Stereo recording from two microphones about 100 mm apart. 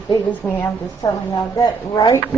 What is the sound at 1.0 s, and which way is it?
A woman's voice, 45° left (ahead or behind).